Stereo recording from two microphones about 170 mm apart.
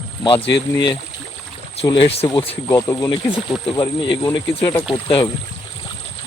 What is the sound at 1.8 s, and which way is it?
Speech, 35° left (ahead or behind).